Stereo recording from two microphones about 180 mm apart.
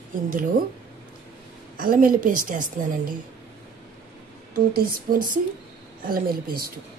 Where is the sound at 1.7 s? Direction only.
50° right (ahead or behind).